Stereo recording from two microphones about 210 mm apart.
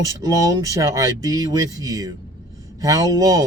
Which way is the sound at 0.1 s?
15° right (ahead or behind).